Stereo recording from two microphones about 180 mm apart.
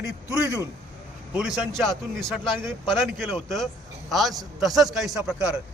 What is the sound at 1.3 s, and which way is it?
A man's voice, 5° right (ahead or behind).